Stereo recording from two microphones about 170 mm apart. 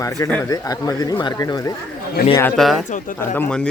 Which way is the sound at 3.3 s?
10° left (ahead or behind).